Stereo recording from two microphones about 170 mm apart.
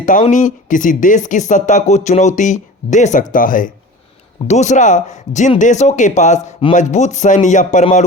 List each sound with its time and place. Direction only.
0.0 s speech: 45° left (ahead or behind)